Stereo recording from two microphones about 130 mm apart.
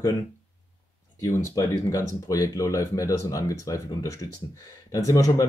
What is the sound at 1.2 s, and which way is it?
Speech, 25° left (ahead or behind).